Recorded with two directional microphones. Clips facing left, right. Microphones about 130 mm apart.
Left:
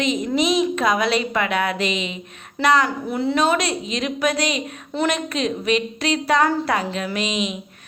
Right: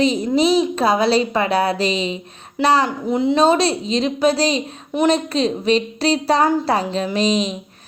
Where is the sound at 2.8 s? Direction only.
20° right (ahead or behind).